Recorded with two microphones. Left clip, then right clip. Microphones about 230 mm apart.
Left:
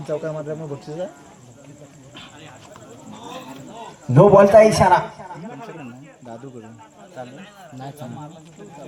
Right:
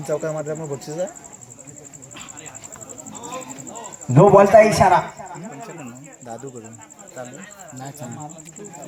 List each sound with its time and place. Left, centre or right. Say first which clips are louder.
0.0 s speech: right 2 dB; right
4.1 s a man's voice: even; left